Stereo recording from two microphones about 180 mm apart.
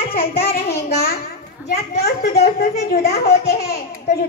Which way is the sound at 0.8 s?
60° left (ahead or behind).